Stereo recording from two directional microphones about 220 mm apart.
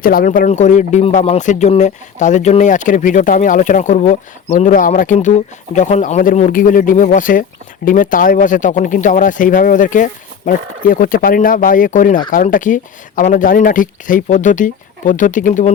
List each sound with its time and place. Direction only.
0.0 s speech: 40° left (ahead or behind)